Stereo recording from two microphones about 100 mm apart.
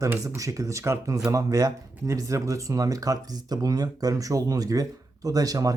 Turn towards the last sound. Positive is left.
turn(degrees=-35)  # may be behind; listen again after turning